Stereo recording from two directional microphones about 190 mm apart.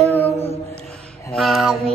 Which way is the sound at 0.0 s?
10° left (ahead or behind).